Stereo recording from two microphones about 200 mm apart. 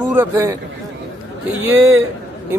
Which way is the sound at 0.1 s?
15° right (ahead or behind).